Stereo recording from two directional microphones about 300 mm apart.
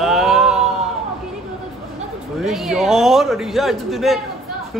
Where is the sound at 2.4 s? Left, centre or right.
Centre.